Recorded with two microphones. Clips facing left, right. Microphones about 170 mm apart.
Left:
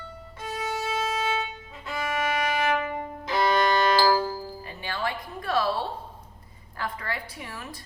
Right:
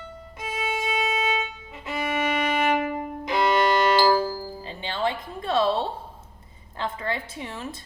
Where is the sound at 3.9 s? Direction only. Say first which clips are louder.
Right 2 dB; 20° right (ahead or behind).